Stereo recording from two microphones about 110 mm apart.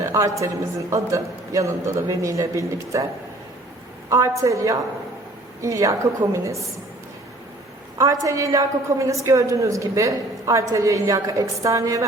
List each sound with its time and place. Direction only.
0.0 s a woman's voice: 30° right (ahead or behind)
4.1 s a woman's voice: 30° right (ahead or behind)
7.9 s a woman's voice: 30° right (ahead or behind)